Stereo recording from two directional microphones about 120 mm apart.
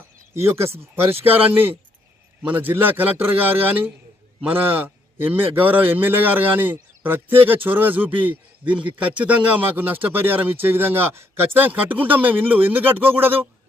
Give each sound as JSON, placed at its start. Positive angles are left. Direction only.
{"t": 0.3, "sound": "a man's voice", "side_deg": -20}